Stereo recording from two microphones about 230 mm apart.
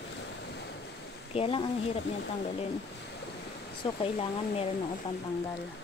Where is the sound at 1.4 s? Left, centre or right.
Left.